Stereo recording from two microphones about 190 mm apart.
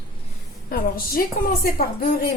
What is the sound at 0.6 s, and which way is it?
A woman's voice, 50° left (ahead or behind).